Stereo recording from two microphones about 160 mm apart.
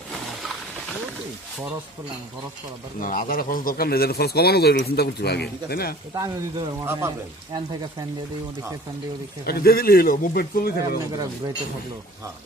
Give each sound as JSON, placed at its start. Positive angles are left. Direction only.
{"t": 3.0, "sound": "speech", "side_deg": 60}
{"t": 6.1, "sound": "speech", "side_deg": -20}
{"t": 9.5, "sound": "speech", "side_deg": 75}